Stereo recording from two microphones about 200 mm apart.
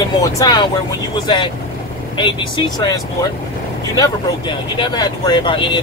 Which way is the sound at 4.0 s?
20° left (ahead or behind).